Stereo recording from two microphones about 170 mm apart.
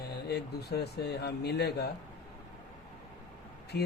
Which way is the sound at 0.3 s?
75° left (ahead or behind).